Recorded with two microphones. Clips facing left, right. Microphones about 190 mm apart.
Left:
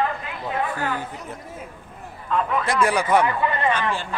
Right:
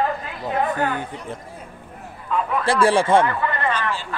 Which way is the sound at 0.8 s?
25° right (ahead or behind).